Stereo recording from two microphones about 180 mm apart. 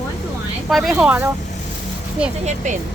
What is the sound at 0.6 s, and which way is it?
Speech, centre (ahead or behind).